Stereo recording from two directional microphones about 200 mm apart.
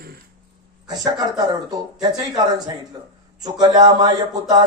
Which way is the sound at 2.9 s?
20° right (ahead or behind).